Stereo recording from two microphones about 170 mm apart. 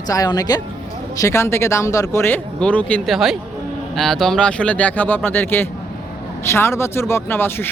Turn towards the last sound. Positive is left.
turn(degrees=10)  # may be behind; listen again after turning